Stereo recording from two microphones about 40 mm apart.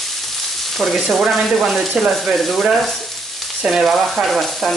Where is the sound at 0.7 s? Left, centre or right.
Centre.